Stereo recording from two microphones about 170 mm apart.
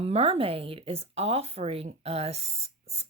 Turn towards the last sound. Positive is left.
turn(degrees=-40)  # may be behind; listen again after turning